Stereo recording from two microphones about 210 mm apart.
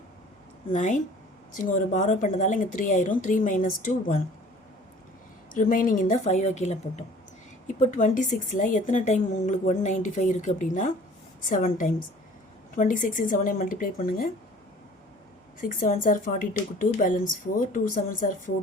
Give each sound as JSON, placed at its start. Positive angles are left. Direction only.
{"t": 0.7, "sound": "a woman's voice", "side_deg": 35}
{"t": 5.5, "sound": "a woman's voice", "side_deg": 40}
{"t": 15.6, "sound": "a woman's voice", "side_deg": 40}